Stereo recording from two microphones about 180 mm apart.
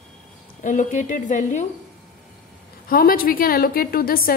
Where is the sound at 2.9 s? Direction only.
55° left (ahead or behind).